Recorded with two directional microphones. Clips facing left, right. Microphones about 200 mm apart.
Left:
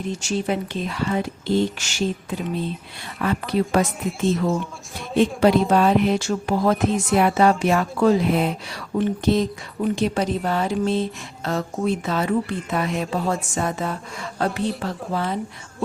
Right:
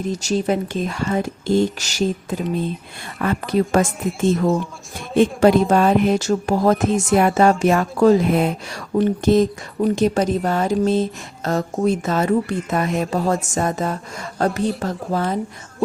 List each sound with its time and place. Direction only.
0.0 s a woman's voice: 40° right (ahead or behind)